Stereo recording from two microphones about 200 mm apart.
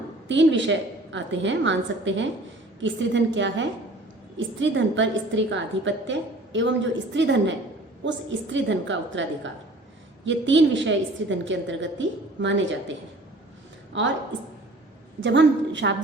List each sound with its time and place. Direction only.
0.3 s a woman's voice: 65° right (ahead or behind)
13.9 s a woman's voice: 65° right (ahead or behind)
15.2 s a woman's voice: 65° right (ahead or behind)